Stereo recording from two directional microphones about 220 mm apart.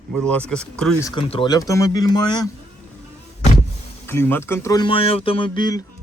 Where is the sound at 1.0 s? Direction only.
25° left (ahead or behind).